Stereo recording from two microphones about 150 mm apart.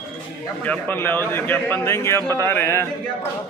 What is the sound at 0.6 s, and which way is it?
A man's voice, 10° left (ahead or behind).